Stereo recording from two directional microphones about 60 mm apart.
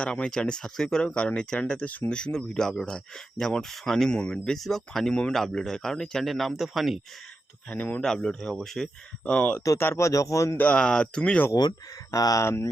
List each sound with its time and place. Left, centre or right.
0.0 s speech: centre
1.0 s speech: centre
4.5 s speech: centre
7.7 s speech: left
8.0 s speech: centre
9.2 s speech: left
9.7 s speech: left
10.1 s speech: left
10.8 s speech: centre
12.1 s speech: left